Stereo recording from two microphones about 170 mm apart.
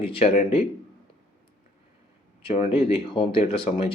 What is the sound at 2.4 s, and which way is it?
Speech, 40° left (ahead or behind).